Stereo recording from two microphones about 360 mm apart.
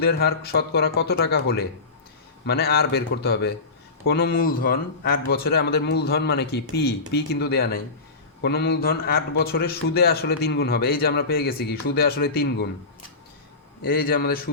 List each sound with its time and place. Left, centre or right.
0.0 s a man's voice: left
13.8 s a man's voice: left